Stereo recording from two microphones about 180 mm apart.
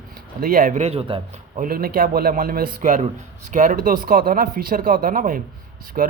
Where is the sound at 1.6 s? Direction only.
55° right (ahead or behind).